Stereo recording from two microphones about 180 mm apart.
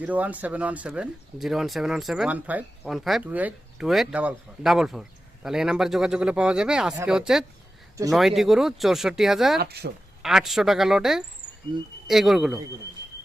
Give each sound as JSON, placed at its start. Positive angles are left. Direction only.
{"t": 0.0, "sound": "speech", "side_deg": -10}
{"t": 9.6, "sound": "speech", "side_deg": -60}
{"t": 10.2, "sound": "speech", "side_deg": 0}
{"t": 11.7, "sound": "speech", "side_deg": -25}
{"t": 12.0, "sound": "speech", "side_deg": 0}